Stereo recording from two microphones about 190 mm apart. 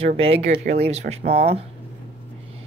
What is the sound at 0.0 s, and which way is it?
Speech, 30° right (ahead or behind).